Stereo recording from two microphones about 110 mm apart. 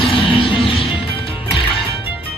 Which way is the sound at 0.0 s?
50° left (ahead or behind).